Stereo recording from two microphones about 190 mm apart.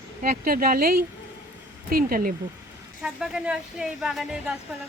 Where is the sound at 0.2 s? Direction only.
50° right (ahead or behind).